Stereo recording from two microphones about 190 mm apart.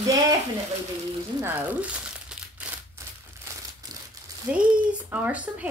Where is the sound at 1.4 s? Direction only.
10° right (ahead or behind).